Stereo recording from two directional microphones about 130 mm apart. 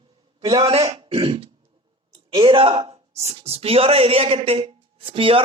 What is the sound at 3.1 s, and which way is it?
Speech, 55° right (ahead or behind).